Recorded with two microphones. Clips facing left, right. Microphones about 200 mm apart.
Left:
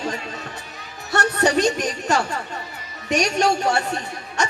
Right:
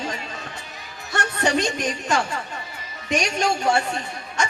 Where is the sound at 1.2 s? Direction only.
40° left (ahead or behind).